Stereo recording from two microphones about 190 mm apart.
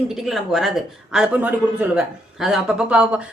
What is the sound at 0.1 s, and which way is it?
Speech, centre (ahead or behind).